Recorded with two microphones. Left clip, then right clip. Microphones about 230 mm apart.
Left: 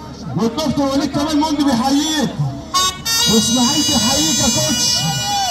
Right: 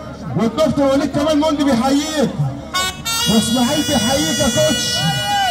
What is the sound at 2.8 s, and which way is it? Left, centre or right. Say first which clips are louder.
Music: left 3 dB; right.